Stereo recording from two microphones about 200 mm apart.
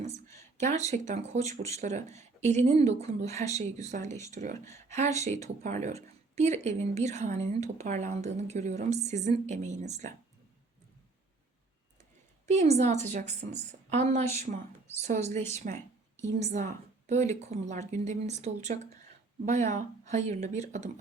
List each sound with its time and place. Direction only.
0.5 s speech: 35° right (ahead or behind)
12.5 s speech: 35° right (ahead or behind)